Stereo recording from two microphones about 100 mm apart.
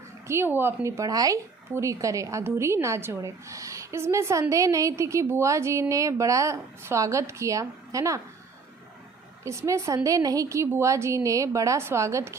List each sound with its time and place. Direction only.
0.3 s a woman's voice: 25° right (ahead or behind)
9.4 s a woman's voice: 30° right (ahead or behind)